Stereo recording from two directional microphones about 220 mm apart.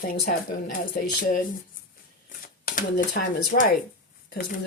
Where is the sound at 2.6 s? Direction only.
40° left (ahead or behind).